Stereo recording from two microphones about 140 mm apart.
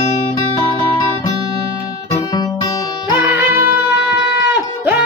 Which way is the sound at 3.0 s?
15° right (ahead or behind).